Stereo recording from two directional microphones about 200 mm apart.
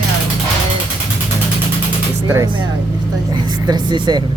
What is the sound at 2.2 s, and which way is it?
Speech, 15° right (ahead or behind).